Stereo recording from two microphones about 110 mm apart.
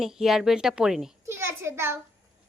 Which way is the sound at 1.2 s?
25° right (ahead or behind).